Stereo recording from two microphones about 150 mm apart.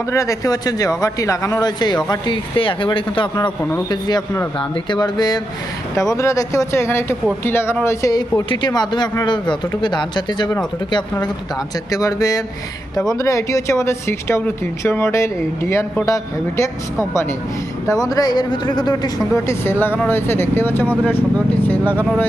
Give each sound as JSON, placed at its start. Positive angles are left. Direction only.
{"t": 0.1, "sound": "speech", "side_deg": 20}
{"t": 3.6, "sound": "speech", "side_deg": 15}
{"t": 3.8, "sound": "speech", "side_deg": 25}
{"t": 11.9, "sound": "speech", "side_deg": 25}